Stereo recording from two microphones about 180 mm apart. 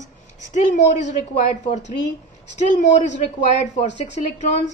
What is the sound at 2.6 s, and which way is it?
A woman's voice, 45° left (ahead or behind).